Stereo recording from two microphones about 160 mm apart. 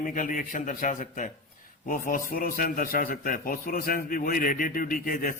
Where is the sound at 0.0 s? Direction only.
55° left (ahead or behind).